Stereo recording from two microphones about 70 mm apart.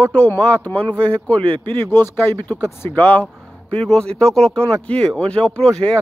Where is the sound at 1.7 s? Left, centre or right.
Left.